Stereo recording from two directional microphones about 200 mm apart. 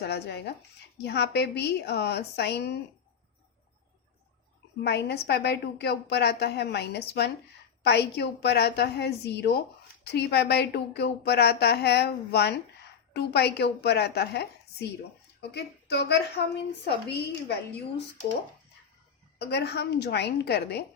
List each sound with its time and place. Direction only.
0.0 s a woman's voice: 55° left (ahead or behind)
4.8 s a woman's voice: 55° left (ahead or behind)
19.4 s a woman's voice: 55° left (ahead or behind)